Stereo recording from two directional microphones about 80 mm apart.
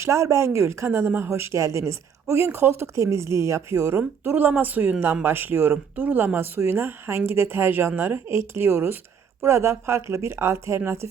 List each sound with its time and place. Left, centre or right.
0.0 s a woman's voice: right